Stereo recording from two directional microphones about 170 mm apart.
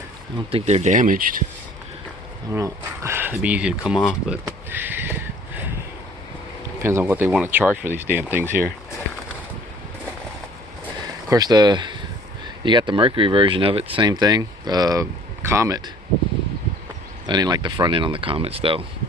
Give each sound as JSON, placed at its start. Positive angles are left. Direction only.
{"t": 0.5, "sound": "speech", "side_deg": -40}
{"t": 2.5, "sound": "speech", "side_deg": -15}
{"t": 6.8, "sound": "speech", "side_deg": -15}
{"t": 11.3, "sound": "speech", "side_deg": -20}
{"t": 17.2, "sound": "speech", "side_deg": -25}